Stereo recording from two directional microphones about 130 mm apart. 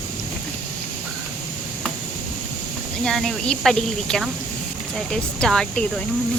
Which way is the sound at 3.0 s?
5° left (ahead or behind).